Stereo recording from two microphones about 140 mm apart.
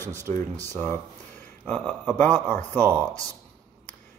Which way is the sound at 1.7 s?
10° left (ahead or behind).